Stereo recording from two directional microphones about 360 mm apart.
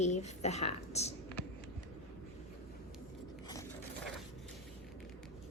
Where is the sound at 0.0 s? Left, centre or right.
Centre.